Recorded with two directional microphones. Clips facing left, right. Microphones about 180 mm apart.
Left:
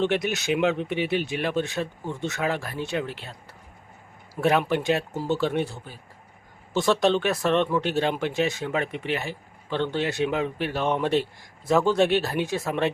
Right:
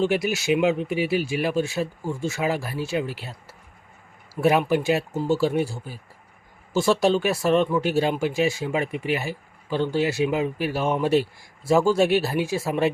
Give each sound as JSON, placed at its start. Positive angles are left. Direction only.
{"t": 0.0, "sound": "speech", "side_deg": -5}
{"t": 4.4, "sound": "speech", "side_deg": -10}